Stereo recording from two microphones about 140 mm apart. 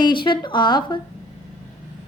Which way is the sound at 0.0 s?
35° left (ahead or behind).